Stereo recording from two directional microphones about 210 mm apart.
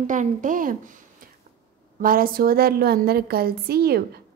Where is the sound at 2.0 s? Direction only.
45° right (ahead or behind).